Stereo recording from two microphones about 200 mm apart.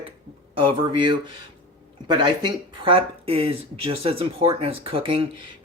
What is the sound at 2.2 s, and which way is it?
Speech, 25° right (ahead or behind).